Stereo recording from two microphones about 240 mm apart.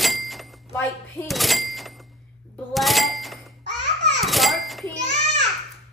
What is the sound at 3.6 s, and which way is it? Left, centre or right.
Babbling, right.